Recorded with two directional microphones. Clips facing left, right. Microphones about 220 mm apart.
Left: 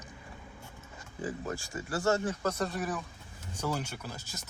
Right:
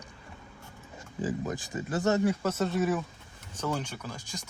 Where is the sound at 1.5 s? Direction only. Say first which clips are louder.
Right 3 dB; 20° right (ahead or behind).